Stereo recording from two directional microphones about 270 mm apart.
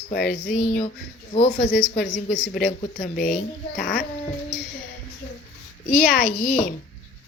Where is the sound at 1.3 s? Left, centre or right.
Left.